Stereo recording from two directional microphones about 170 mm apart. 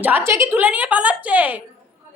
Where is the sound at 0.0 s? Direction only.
10° right (ahead or behind).